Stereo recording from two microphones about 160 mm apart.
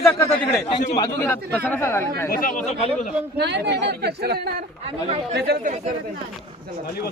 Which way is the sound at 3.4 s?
90° right.